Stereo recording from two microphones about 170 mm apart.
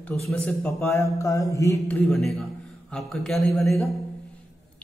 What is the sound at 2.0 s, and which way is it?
A man's voice, centre (ahead or behind).